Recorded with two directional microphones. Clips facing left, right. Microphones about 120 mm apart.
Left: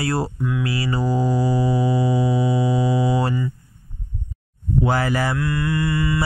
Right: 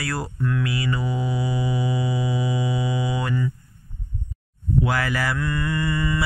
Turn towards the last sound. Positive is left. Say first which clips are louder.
# left 3 dB
turn(degrees=10)  # may be behind; listen again after turning